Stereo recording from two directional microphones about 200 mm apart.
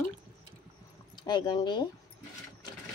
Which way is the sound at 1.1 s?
20° left (ahead or behind).